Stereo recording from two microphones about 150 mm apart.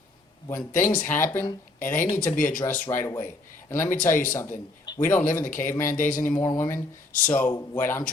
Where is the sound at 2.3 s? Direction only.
65° left (ahead or behind).